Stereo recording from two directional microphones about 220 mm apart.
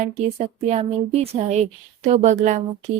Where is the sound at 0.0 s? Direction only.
30° right (ahead or behind).